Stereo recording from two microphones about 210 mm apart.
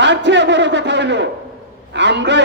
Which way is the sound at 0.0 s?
55° right (ahead or behind).